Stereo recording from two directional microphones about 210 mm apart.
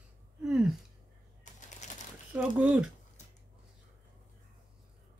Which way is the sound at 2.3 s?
5° right (ahead or behind).